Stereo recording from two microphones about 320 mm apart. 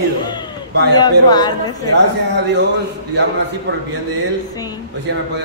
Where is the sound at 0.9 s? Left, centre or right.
Centre.